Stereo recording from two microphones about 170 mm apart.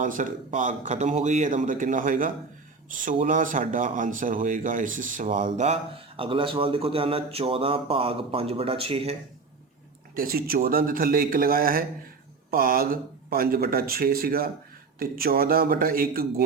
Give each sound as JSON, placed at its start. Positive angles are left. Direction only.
{"t": 0.0, "sound": "speech", "side_deg": -50}
{"t": 10.2, "sound": "speech", "side_deg": -60}